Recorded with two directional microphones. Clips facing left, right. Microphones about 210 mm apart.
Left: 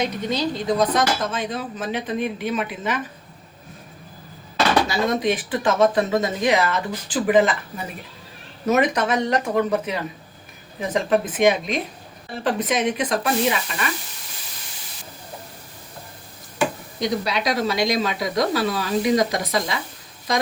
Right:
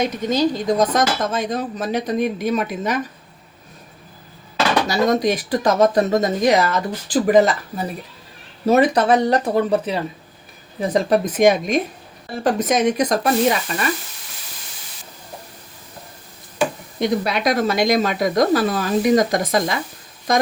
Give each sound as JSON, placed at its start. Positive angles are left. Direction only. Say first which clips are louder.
{"t": 0.0, "sound": "speech", "louder": "right 5 dB", "side_deg": -45}
{"t": 4.9, "sound": "speech", "louder": "right 4 dB", "side_deg": -40}
{"t": 17.0, "sound": "speech", "louder": "right 4 dB", "side_deg": -55}